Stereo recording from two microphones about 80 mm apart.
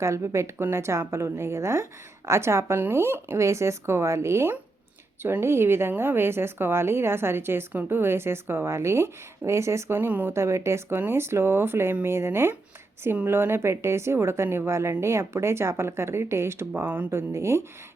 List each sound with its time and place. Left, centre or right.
0.0 s a woman's voice: right
10.3 s a woman's voice: right
17.1 s a woman's voice: right